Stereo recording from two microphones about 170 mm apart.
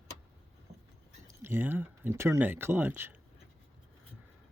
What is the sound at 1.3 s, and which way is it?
Speech, 15° right (ahead or behind).